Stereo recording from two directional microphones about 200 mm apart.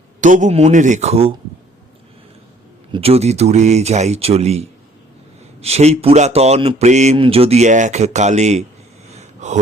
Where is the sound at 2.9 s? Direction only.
30° right (ahead or behind).